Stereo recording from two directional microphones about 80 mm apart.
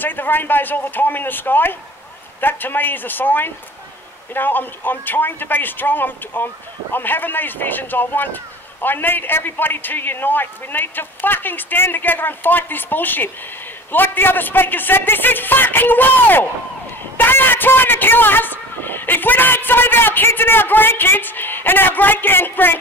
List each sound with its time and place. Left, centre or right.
0.0 s a man's voice: left